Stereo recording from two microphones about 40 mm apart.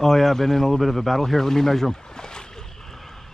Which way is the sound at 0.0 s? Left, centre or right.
Centre.